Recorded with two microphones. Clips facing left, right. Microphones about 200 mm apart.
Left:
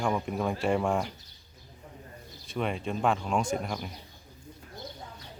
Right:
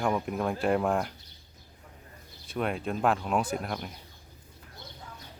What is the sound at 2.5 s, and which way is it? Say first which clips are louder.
Speech: right 1 dB; centre (ahead or behind).